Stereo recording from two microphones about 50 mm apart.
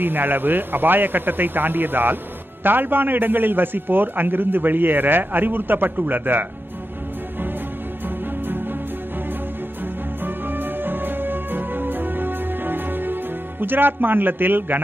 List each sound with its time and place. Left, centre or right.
0.0 s a man's voice: right
10.2 s music: right